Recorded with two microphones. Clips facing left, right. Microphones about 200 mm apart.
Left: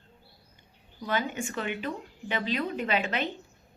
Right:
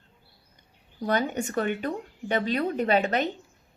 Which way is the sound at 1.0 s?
40° right (ahead or behind).